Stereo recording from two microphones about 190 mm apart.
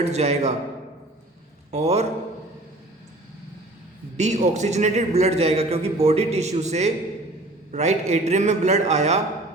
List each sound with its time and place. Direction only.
0.0 s a man's voice: 35° right (ahead or behind)
1.7 s a man's voice: 35° right (ahead or behind)
4.2 s a man's voice: 40° right (ahead or behind)